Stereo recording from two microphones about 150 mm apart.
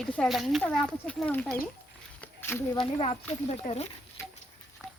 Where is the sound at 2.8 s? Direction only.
40° left (ahead or behind).